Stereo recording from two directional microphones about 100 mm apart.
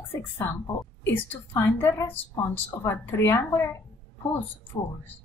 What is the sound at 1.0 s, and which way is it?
A woman's voice, 20° left (ahead or behind).